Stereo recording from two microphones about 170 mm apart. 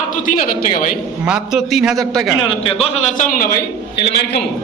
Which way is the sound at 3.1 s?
55° left (ahead or behind).